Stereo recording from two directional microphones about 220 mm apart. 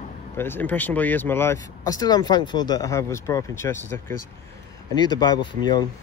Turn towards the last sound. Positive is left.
turn(degrees=20)  # may be behind; listen again after turning